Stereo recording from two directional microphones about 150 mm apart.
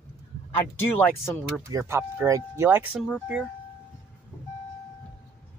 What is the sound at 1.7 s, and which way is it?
Speech, 20° right (ahead or behind).